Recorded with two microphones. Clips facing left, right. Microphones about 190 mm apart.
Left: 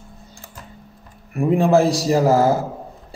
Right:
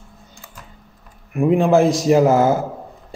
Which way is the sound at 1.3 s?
35° left (ahead or behind).